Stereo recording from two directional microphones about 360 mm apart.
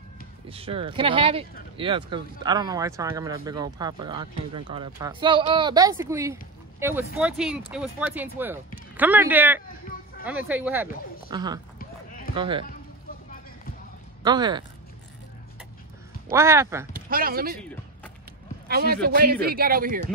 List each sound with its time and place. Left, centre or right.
0.5 s speech: centre
14.2 s speech: centre
16.3 s speech: centre
16.9 s speech: right
17.6 s music: centre
18.7 s a man's voice: right